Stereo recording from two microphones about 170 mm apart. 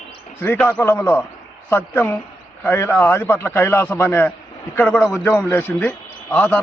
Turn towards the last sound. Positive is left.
turn(degrees=10)  # may be behind; listen again after turning